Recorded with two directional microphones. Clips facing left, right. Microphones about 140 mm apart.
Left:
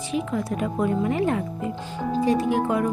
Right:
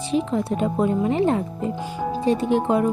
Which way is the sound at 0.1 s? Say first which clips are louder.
Right 4 dB; 30° right (ahead or behind).